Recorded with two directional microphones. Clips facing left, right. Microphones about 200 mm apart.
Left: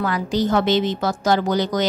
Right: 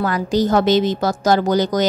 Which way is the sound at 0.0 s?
40° right (ahead or behind).